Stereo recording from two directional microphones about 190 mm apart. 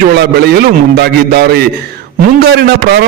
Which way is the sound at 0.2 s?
55° right (ahead or behind).